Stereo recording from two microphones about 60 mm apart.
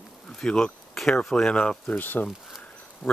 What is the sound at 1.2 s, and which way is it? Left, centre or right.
Speech, centre.